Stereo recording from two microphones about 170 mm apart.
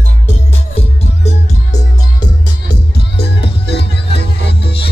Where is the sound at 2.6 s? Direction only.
75° left (ahead or behind).